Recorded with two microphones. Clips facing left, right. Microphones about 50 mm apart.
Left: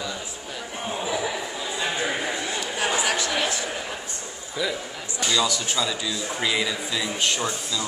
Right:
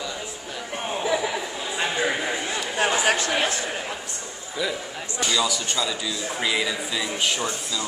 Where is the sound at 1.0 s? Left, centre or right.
Right.